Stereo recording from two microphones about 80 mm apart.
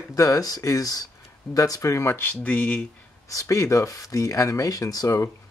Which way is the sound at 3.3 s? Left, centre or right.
Left.